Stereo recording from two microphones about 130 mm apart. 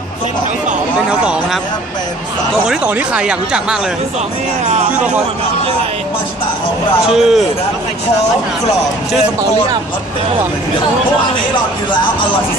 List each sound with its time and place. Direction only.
2.7 s speech: 10° right (ahead or behind)
7.2 s a man's voice: 5° right (ahead or behind)